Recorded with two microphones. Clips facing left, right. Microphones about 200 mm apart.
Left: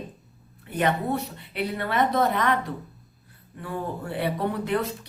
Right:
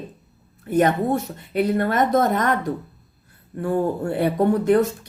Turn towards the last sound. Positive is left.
turn(degrees=-45)  # may be behind; listen again after turning